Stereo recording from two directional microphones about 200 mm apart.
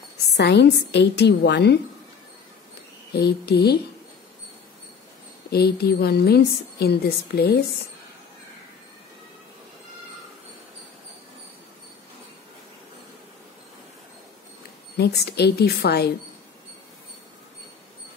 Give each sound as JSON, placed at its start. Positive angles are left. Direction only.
{"t": 0.3, "sound": "a woman's voice", "side_deg": 60}
{"t": 3.1, "sound": "a woman's voice", "side_deg": 55}
{"t": 5.5, "sound": "a woman's voice", "side_deg": 55}
{"t": 15.0, "sound": "a woman's voice", "side_deg": 55}